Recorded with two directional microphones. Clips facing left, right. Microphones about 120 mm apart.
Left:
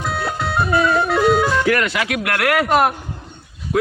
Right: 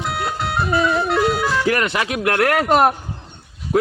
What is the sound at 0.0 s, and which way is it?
Music, 20° right (ahead or behind).